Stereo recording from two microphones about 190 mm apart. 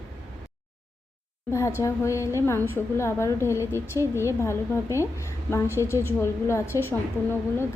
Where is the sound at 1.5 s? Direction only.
15° left (ahead or behind).